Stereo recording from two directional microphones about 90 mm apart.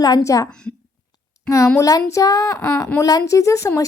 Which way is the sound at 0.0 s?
40° left (ahead or behind).